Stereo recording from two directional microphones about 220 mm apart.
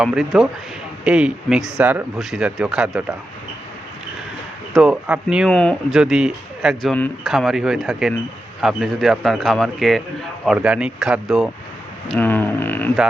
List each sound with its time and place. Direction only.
0.0 s speech: 5° right (ahead or behind)
4.7 s speech: 5° right (ahead or behind)